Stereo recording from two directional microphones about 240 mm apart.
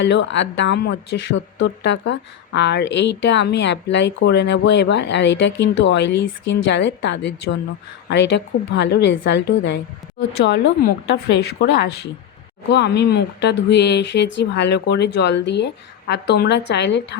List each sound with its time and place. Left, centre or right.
0.0 s speech: left